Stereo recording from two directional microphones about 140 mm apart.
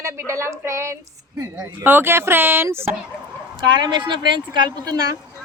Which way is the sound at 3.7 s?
35° right (ahead or behind).